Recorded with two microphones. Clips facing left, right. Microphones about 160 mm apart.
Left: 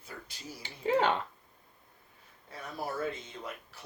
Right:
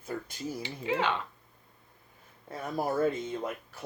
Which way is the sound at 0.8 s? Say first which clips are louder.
Left 3 dB; 45° left (ahead or behind).